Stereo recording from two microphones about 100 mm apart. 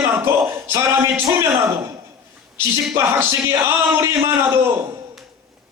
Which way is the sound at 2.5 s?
25° right (ahead or behind).